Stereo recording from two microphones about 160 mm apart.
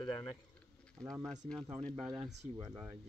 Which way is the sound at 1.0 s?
5° left (ahead or behind).